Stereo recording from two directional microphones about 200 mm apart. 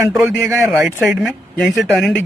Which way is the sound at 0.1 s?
10° right (ahead or behind).